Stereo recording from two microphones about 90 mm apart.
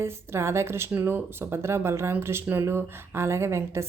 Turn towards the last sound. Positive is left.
turn(degrees=-30)  # may be behind; listen again after turning